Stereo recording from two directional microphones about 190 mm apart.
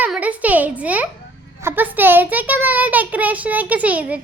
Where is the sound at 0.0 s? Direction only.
10° right (ahead or behind).